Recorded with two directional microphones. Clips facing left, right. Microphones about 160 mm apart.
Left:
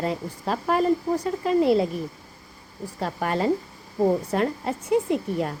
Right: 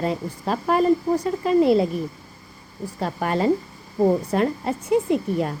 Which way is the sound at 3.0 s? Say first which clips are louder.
Right 2 dB; 20° right (ahead or behind).